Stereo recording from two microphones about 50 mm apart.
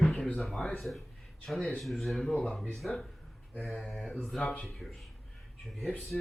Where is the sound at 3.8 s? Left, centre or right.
Centre.